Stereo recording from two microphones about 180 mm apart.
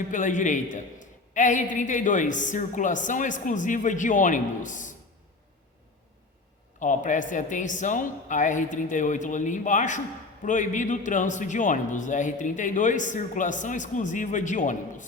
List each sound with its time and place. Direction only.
0.1 s a man's voice: 45° left (ahead or behind)
6.7 s a man's voice: 45° left (ahead or behind)